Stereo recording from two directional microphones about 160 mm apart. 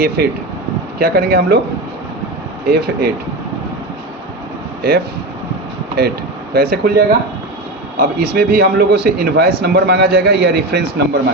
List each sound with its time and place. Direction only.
0.2 s speech: 90° right
0.9 s a man's voice: 80° right
2.6 s a man's voice: 80° right
4.8 s speech: 75° right (ahead or behind)
6.5 s speech: 75° right (ahead or behind)
7.9 s a man's voice: 75° right (ahead or behind); by 11.2 s 90° right